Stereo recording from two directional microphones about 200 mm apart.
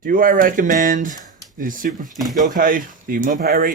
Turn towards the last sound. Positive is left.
turn(degrees=-40)  # may be behind; listen again after turning